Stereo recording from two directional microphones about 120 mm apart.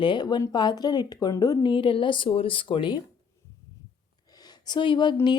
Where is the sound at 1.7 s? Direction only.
45° left (ahead or behind).